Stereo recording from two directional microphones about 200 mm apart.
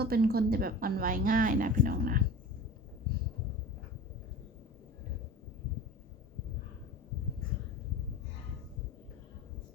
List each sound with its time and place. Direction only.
0.0 s speech: 50° right (ahead or behind)